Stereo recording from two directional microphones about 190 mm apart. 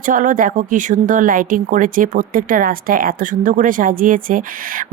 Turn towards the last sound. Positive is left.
turn(degrees=-45)  # may be behind; listen again after turning